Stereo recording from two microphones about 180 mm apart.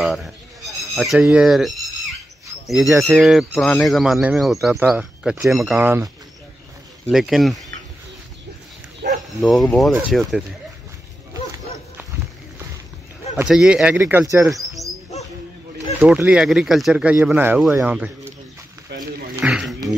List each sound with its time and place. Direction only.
0.0 s speech: centre (ahead or behind)
7.1 s speech: centre (ahead or behind)
9.0 s bow-wow: 65° right (ahead or behind)
9.4 s speech: centre (ahead or behind)
13.5 s speech: 5° right (ahead or behind)
16.0 s speech: 5° right (ahead or behind)
18.9 s speech: 65° right (ahead or behind)
19.4 s a sound: 5° right (ahead or behind)